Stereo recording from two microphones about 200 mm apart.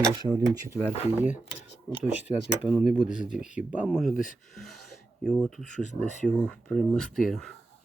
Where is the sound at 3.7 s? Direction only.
5° right (ahead or behind).